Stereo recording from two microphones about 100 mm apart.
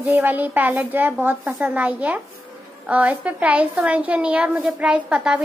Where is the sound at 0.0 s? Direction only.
20° right (ahead or behind).